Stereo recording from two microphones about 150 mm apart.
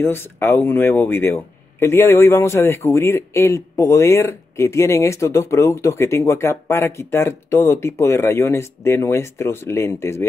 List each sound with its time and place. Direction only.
0.0 s speech: 15° left (ahead or behind)